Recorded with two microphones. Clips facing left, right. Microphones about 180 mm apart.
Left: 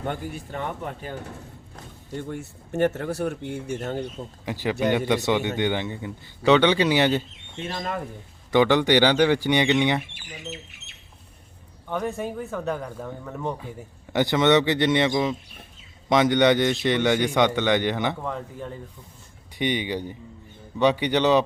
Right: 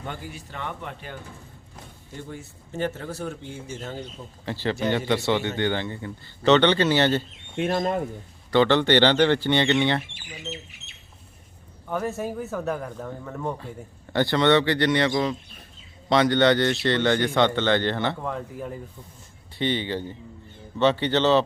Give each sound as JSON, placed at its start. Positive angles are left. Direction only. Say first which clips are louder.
{"t": 0.0, "sound": "speech", "louder": "left 5 dB", "side_deg": 50}
{"t": 2.1, "sound": "speech", "louder": "left 6 dB", "side_deg": 60}
{"t": 4.4, "sound": "speech", "louder": "left 2 dB", "side_deg": 10}
{"t": 7.7, "sound": "speech", "louder": "right 6 dB", "side_deg": -40}
{"t": 8.4, "sound": "speech", "louder": "even", "side_deg": 15}
{"t": 11.9, "sound": "speech", "louder": "even", "side_deg": -5}
{"t": 14.1, "sound": "a man's voice", "louder": "left 1 dB", "side_deg": 15}
{"t": 18.2, "sound": "speech", "louder": "right 1 dB", "side_deg": -5}
{"t": 19.5, "sound": "speech", "louder": "even", "side_deg": 15}